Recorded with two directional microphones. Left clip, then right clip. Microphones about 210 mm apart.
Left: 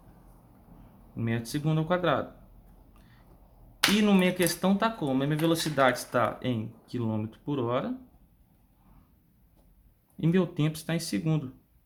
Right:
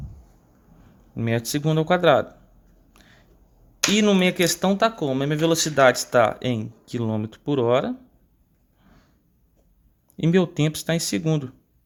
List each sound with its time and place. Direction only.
1.1 s speech: 40° right (ahead or behind)
2.9 s a sound: 35° right (ahead or behind)
3.9 s speech: 30° right (ahead or behind)
10.2 s speech: 35° right (ahead or behind)